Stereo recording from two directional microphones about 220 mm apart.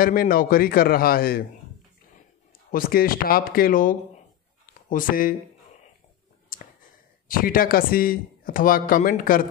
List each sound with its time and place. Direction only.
0.0 s a man's voice: 40° left (ahead or behind)
2.7 s speech: 40° left (ahead or behind)
6.5 s a sound: 40° left (ahead or behind)
7.2 s speech: 40° left (ahead or behind)